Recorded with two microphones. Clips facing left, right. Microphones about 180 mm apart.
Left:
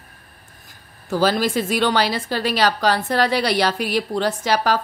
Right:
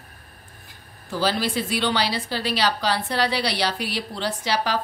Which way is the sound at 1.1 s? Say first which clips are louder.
Left 5 dB; 45° left (ahead or behind).